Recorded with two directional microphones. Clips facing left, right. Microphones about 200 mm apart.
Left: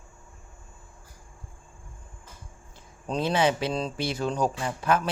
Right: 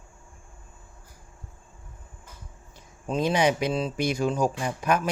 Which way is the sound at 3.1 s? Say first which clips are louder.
Right 1 dB; 15° right (ahead or behind).